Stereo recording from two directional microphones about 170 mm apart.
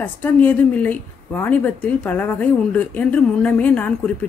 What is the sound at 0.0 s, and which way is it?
A woman's voice, 10° left (ahead or behind).